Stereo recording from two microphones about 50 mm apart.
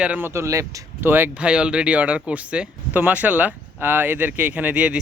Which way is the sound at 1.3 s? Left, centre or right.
Right.